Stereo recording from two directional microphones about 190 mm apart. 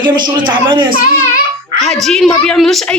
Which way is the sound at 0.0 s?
25° right (ahead or behind).